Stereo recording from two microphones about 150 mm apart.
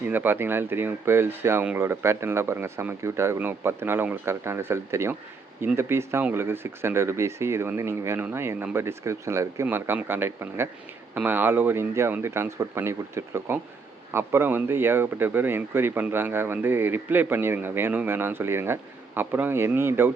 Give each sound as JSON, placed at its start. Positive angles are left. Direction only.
{"t": 0.1, "sound": "speech", "side_deg": -15}